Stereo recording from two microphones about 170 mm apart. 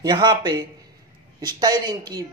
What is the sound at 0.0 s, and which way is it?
Speech, 25° right (ahead or behind).